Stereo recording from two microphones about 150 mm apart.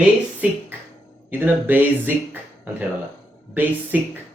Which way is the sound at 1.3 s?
15° right (ahead or behind).